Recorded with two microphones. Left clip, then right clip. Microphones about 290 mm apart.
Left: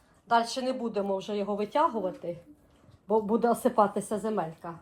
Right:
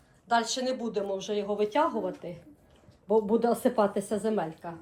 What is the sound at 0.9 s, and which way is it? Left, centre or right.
A woman's voice, left.